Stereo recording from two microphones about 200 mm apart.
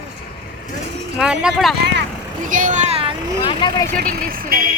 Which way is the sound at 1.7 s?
55° right (ahead or behind).